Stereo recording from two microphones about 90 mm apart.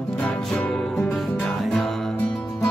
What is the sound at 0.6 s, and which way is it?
Music, 15° left (ahead or behind).